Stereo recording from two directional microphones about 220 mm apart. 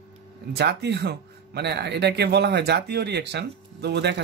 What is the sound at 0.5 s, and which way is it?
Speech, 50° right (ahead or behind).